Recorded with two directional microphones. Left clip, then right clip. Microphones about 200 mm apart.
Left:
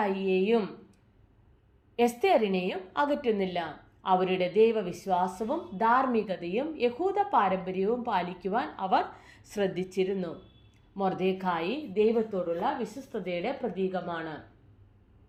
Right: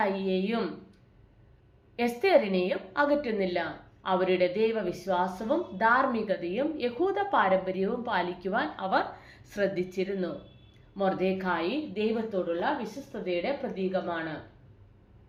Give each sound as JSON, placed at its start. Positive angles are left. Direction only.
{"t": 0.0, "sound": "speech", "side_deg": 40}
{"t": 2.0, "sound": "a woman's voice", "side_deg": 40}
{"t": 13.2, "sound": "a woman's voice", "side_deg": 40}